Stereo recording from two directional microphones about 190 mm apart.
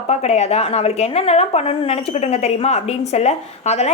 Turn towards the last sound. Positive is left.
turn(degrees=35)  # may be behind; listen again after turning